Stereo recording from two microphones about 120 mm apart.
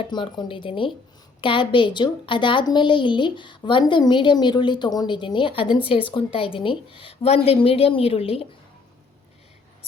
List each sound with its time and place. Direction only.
0.0 s a woman's voice: 40° left (ahead or behind)